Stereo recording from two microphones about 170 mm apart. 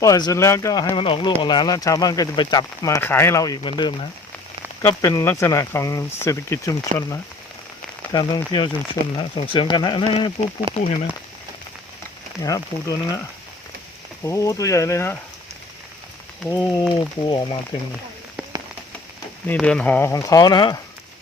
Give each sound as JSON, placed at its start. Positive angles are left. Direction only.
{"t": 0.0, "sound": "speech", "side_deg": 20}
{"t": 4.8, "sound": "speech", "side_deg": 15}
{"t": 8.1, "sound": "speech", "side_deg": 25}
{"t": 10.7, "sound": "speech", "side_deg": -25}
{"t": 12.4, "sound": "speech", "side_deg": 20}
{"t": 14.3, "sound": "speech", "side_deg": 20}
{"t": 16.5, "sound": "speech", "side_deg": 20}
{"t": 19.5, "sound": "speech", "side_deg": 5}